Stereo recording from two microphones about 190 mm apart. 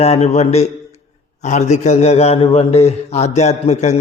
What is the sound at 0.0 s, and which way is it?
A man's voice, 35° left (ahead or behind).